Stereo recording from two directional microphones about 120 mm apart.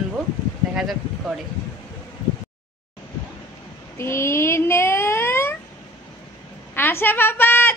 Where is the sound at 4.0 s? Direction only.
20° left (ahead or behind).